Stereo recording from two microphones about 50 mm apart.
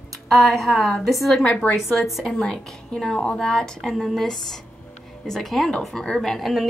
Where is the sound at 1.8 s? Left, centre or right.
Centre.